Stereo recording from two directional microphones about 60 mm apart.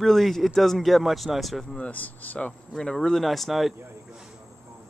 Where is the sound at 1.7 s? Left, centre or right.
Left; by 3.8 s centre.